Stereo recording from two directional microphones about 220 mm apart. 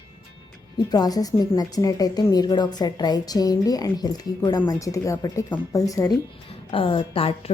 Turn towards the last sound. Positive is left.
turn(degrees=25)  # may be behind; listen again after turning